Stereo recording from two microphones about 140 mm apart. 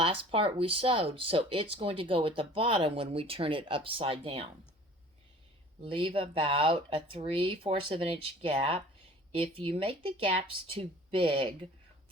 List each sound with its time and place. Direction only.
0.0 s speech: 40° right (ahead or behind)
5.8 s speech: 40° right (ahead or behind)